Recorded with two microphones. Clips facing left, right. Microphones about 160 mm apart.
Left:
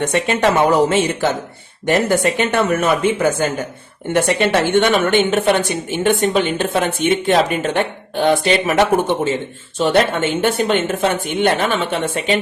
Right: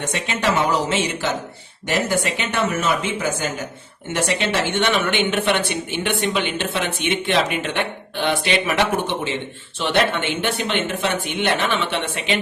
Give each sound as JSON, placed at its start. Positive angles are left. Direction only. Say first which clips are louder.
{"t": 0.0, "sound": "a woman's voice", "louder": "left 7 dB", "side_deg": 55}